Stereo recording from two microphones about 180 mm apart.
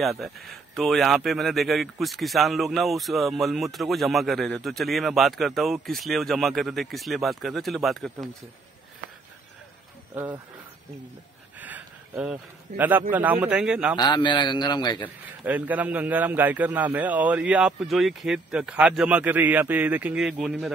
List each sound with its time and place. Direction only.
0.0 s speech: centre (ahead or behind)
11.6 s a sound: 5° right (ahead or behind)
13.1 s a man's voice: 10° right (ahead or behind)
13.9 s a man's voice: 25° left (ahead or behind)
15.0 s a man's voice: 10° right (ahead or behind)